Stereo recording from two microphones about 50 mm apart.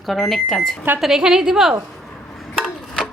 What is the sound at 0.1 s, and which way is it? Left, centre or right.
Speech, centre.